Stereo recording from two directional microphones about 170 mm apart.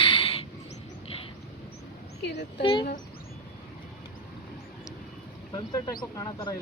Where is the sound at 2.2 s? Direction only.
85° left.